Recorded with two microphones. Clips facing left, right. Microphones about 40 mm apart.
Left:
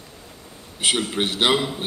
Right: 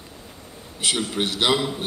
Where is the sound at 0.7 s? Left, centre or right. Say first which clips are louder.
Left 2 dB; left.